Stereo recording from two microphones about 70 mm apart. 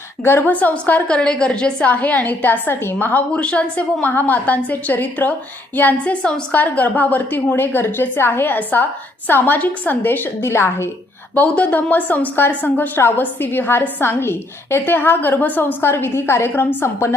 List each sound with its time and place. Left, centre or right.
0.3 s a woman's voice: left
11.3 s a woman's voice: centre; by 17.2 s left